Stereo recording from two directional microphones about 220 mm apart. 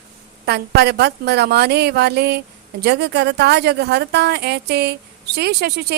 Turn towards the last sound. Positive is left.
turn(degrees=-45)  # may be behind; listen again after turning